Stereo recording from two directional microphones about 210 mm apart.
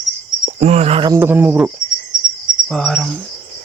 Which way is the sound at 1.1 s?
10° right (ahead or behind).